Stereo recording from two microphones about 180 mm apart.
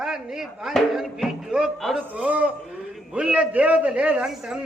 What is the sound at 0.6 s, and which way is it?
A man's voice, centre (ahead or behind).